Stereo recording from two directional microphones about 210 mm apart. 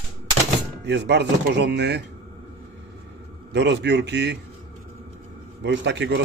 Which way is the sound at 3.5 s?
55° right (ahead or behind).